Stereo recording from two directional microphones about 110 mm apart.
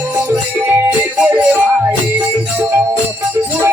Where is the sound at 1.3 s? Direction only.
15° right (ahead or behind).